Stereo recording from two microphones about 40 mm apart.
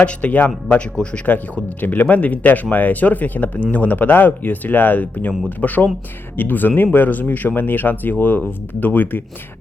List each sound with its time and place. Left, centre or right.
0.0 s a man's voice: left
1.8 s speech: left